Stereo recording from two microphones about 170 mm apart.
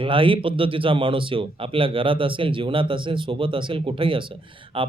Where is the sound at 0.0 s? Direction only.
30° right (ahead or behind).